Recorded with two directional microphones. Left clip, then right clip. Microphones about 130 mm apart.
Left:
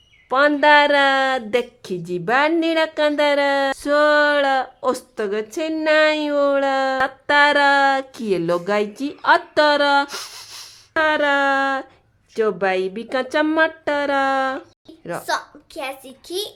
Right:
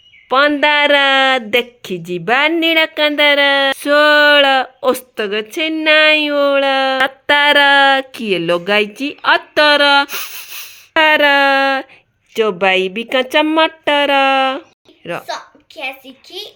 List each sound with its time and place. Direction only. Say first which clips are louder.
0.3 s speech: right 2 dB; 25° right (ahead or behind)
10.9 s speech: right 7 dB; 40° right (ahead or behind); by 15.2 s 20° right (ahead or behind)